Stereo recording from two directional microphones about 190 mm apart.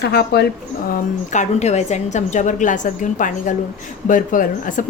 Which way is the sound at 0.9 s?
40° left (ahead or behind).